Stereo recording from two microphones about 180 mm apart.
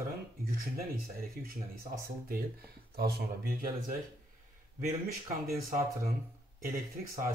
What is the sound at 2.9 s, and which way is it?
Speech, 60° right (ahead or behind).